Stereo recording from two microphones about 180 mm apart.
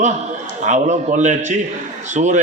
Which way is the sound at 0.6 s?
40° right (ahead or behind).